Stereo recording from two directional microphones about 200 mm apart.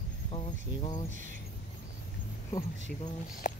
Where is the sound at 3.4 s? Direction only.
40° left (ahead or behind).